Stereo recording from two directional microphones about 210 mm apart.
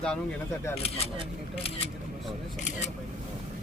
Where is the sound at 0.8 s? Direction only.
30° left (ahead or behind).